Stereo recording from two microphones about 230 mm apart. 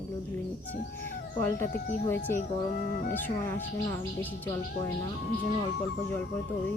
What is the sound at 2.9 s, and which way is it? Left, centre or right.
Speech, left.